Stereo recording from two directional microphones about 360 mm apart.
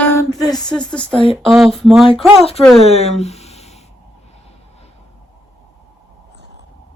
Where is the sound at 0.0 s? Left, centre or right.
Centre.